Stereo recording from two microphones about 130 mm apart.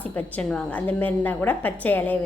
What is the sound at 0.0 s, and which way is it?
A woman's voice, 10° left (ahead or behind).